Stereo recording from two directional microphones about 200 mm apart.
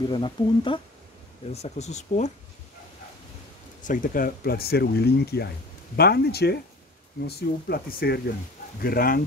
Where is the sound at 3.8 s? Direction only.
40° left (ahead or behind).